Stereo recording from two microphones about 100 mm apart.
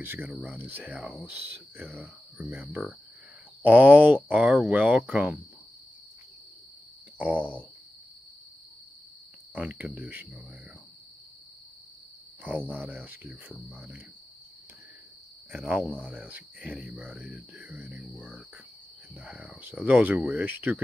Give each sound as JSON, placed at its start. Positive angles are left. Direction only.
{"t": 0.0, "sound": "speech", "side_deg": -20}
{"t": 0.3, "sound": "speech", "side_deg": -5}
{"t": 0.6, "sound": "speech", "side_deg": -15}
{"t": 7.2, "sound": "a sound", "side_deg": -15}
{"t": 9.6, "sound": "speech", "side_deg": -15}
{"t": 12.6, "sound": "speech", "side_deg": -15}
{"t": 15.5, "sound": "speech", "side_deg": -15}